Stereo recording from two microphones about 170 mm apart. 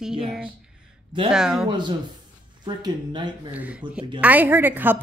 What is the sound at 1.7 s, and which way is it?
Speech, 25° right (ahead or behind).